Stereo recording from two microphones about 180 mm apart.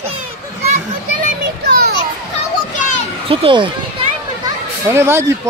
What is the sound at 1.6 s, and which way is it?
Children playing, 65° right (ahead or behind).